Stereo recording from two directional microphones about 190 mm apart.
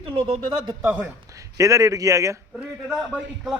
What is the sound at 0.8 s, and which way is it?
A man's voice, 15° right (ahead or behind).